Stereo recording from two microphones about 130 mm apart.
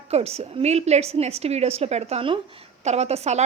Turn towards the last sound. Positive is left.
turn(degrees=-55)  # may be behind; listen again after turning